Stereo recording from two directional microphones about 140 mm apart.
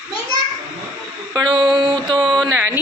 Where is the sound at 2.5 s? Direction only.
15° right (ahead or behind).